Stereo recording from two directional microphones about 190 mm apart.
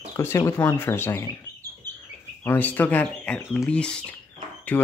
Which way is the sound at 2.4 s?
10° left (ahead or behind).